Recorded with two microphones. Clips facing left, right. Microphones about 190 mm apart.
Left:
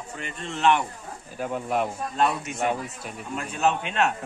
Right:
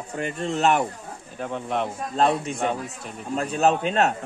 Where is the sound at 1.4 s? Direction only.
5° left (ahead or behind).